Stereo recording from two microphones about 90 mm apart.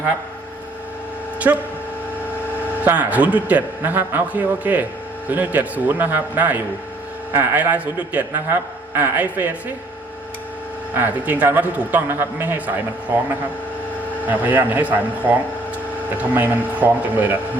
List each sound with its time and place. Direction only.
2.8 s a man's voice: 15° right (ahead or behind)
10.9 s a man's voice: 20° right (ahead or behind)